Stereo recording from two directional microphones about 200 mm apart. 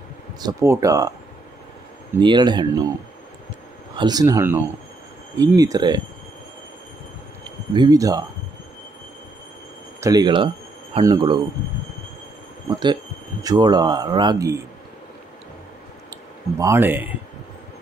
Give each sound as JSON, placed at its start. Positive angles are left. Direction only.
{"t": 0.4, "sound": "speech", "side_deg": -15}
{"t": 2.1, "sound": "speech", "side_deg": -20}
{"t": 3.9, "sound": "speech", "side_deg": -20}
{"t": 7.4, "sound": "speech", "side_deg": -20}
{"t": 9.9, "sound": "speech", "side_deg": -20}
{"t": 12.6, "sound": "speech", "side_deg": -20}
{"t": 16.1, "sound": "speech", "side_deg": -15}